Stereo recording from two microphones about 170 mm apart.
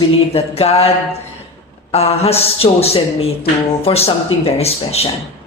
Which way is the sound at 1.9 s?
40° left (ahead or behind).